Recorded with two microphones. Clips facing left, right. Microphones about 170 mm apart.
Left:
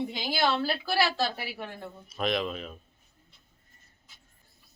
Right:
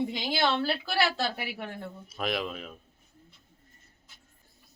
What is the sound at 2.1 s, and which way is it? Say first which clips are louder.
Speech: left 3 dB; 5° right (ahead or behind).